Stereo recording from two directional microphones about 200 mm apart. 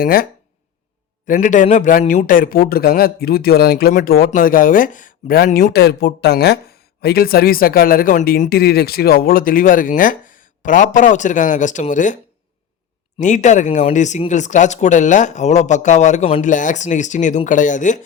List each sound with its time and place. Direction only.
0.0 s speech: 45° left (ahead or behind)
1.3 s speech: 40° left (ahead or behind)
5.7 s speech: 55° left (ahead or behind); by 12.1 s 40° left (ahead or behind)
13.1 s speech: 40° left (ahead or behind)